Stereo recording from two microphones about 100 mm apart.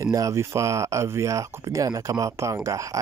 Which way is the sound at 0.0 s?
30° right (ahead or behind).